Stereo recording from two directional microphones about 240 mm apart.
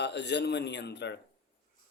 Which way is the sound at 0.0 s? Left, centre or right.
Left.